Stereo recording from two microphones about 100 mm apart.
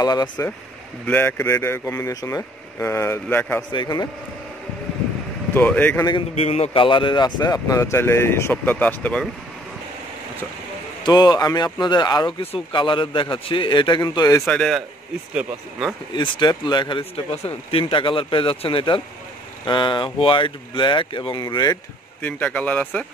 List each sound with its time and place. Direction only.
0.0 s speech: 45° left (ahead or behind)
1.0 s speech: 20° left (ahead or behind)
3.7 s speech: 40° left (ahead or behind)
5.5 s speech: 15° left (ahead or behind)
6.3 s speech: 85° left; by 9.2 s 15° left (ahead or behind)
11.1 s a man's voice: 45° left (ahead or behind)
14.1 s speech: 40° left (ahead or behind)
14.4 s a man's voice: 5° left (ahead or behind)
16.2 s speech: 50° left (ahead or behind)
17.6 s a man's voice: 65° left (ahead or behind); by 21.7 s 45° left (ahead or behind)
22.2 s speech: 15° left (ahead or behind)